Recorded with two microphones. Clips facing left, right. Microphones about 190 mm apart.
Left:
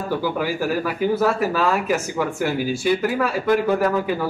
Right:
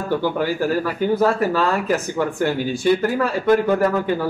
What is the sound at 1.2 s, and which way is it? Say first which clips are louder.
Speech: right 3 dB; 10° left (ahead or behind).